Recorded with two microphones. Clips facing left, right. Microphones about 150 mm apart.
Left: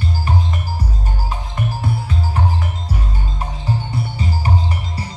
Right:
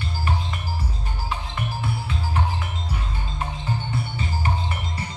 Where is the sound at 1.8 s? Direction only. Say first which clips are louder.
Left 5 dB; 40° left (ahead or behind).